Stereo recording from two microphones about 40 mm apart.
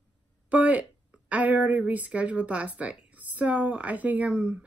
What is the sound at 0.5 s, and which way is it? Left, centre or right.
A woman's voice, right.